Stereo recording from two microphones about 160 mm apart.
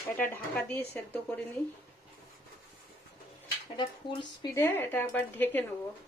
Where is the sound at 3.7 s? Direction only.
30° left (ahead or behind).